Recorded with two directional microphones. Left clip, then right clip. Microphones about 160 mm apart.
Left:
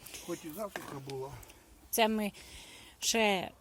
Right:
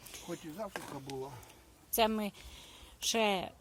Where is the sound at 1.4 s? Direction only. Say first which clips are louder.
Left 1 dB; 10° left (ahead or behind).